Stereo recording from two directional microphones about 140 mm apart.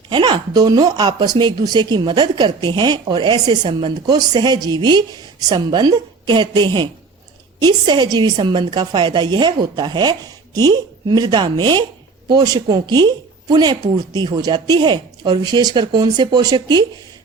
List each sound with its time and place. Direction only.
0.1 s speech: 35° right (ahead or behind)